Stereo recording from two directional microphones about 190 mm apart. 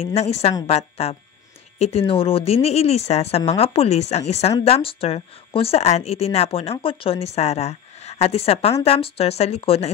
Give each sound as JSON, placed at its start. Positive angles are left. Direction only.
{"t": 0.0, "sound": "speech", "side_deg": 35}